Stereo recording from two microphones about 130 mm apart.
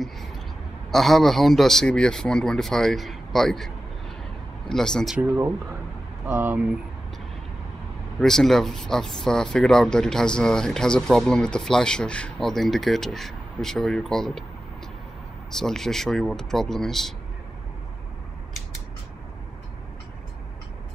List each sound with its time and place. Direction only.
0.9 s speech: centre (ahead or behind)
5.2 s speech: 20° right (ahead or behind)
8.2 s speech: 5° left (ahead or behind)
15.5 s speech: 5° left (ahead or behind)